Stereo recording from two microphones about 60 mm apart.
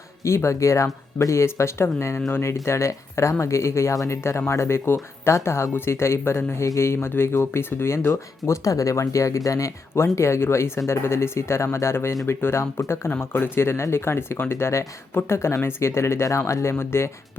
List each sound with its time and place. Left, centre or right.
0.2 s speech: left
8.1 s speech: left